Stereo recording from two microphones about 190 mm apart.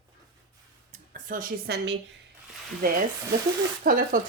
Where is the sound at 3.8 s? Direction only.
45° right (ahead or behind).